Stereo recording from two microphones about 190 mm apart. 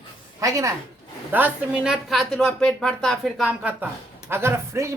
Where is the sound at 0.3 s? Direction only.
15° right (ahead or behind).